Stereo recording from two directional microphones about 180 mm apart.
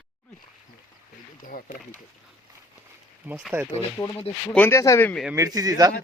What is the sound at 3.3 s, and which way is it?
Speech, 15° right (ahead or behind).